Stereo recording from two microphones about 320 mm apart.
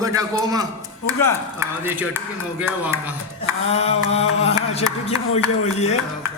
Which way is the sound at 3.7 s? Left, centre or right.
Centre.